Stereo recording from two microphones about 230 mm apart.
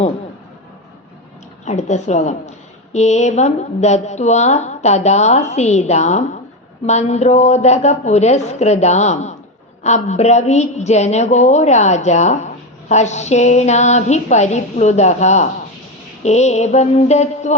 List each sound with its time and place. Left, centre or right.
1.6 s a woman's voice: left